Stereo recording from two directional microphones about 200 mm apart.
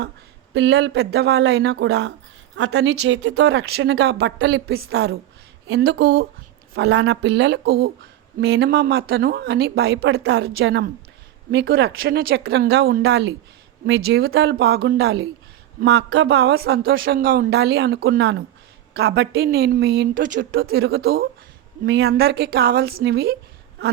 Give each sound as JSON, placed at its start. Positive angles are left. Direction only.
{"t": 0.5, "sound": "a woman's voice", "side_deg": -60}